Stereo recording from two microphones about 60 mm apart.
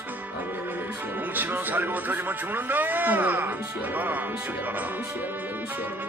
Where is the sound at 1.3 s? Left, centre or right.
Right.